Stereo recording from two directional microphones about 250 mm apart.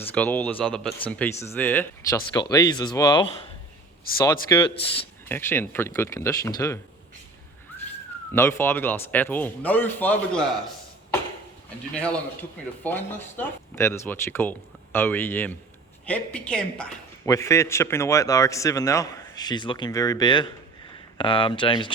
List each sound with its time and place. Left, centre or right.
0.0 s a woman's voice: centre
4.3 s a woman's voice: centre
8.3 s a woman's voice: centre
11.9 s a woman's voice: centre